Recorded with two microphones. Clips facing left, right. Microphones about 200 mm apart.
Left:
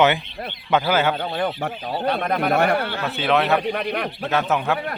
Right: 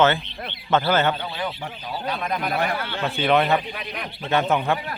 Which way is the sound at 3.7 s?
60° left (ahead or behind).